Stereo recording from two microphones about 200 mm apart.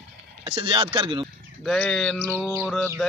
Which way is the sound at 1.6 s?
5° left (ahead or behind).